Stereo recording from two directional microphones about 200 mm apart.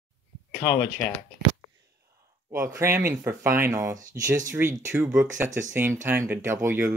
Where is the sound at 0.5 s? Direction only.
10° left (ahead or behind).